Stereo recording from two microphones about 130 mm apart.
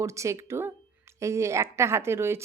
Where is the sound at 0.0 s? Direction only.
25° right (ahead or behind).